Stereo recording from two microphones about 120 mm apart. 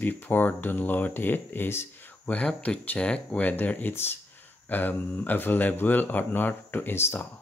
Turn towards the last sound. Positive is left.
turn(degrees=20)  # may be behind; listen again after turning